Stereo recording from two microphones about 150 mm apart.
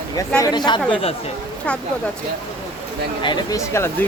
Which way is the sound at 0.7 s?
30° left (ahead or behind).